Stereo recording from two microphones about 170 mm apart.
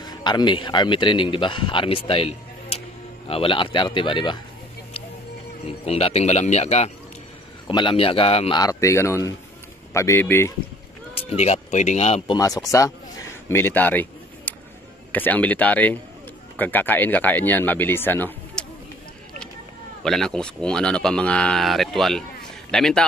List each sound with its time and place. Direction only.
0.0 s a man's voice: 25° left (ahead or behind)
5.7 s a man's voice: 35° left (ahead or behind)
7.6 s a man's voice: 30° left (ahead or behind)
8.5 s speech: 20° left (ahead or behind)
11.1 s a man's voice: 40° left (ahead or behind)
12.4 s speech: 20° left (ahead or behind)
20.0 s speech: 5° left (ahead or behind)